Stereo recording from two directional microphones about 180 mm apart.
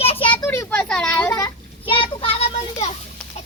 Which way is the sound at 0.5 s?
15° left (ahead or behind).